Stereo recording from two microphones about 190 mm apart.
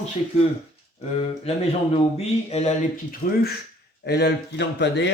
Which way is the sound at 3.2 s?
55° left (ahead or behind).